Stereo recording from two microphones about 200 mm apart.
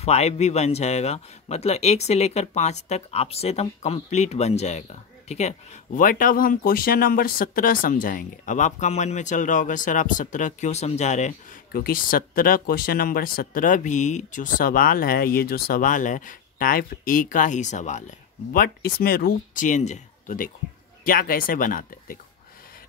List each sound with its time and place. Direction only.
0.0 s speech: 30° left (ahead or behind)
11.7 s speech: 45° left (ahead or behind)